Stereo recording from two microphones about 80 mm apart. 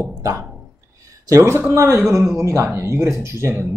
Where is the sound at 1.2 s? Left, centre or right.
Right.